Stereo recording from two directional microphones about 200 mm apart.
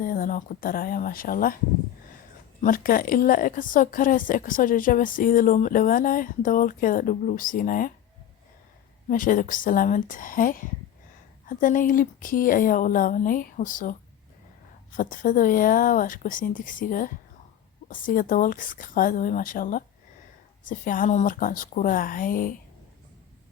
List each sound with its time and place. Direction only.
0.0 s a woman's voice: 45° left (ahead or behind)
2.6 s a woman's voice: 45° left (ahead or behind)
9.0 s a woman's voice: 45° left (ahead or behind)
14.9 s a woman's voice: 40° left (ahead or behind)